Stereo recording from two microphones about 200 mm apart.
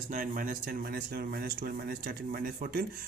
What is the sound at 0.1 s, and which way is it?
Speech, 40° right (ahead or behind).